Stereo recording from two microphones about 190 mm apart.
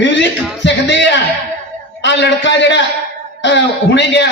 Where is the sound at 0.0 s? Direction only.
70° left (ahead or behind).